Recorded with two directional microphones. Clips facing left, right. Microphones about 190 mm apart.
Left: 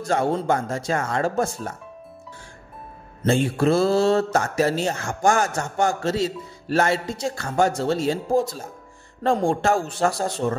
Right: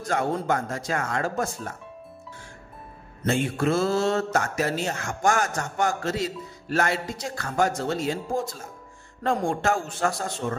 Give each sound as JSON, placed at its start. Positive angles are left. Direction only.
{"t": 0.0, "sound": "speech", "side_deg": 30}
{"t": 3.3, "sound": "speech", "side_deg": 30}